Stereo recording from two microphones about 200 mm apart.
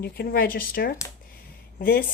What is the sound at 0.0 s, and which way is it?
Speech, 50° left (ahead or behind).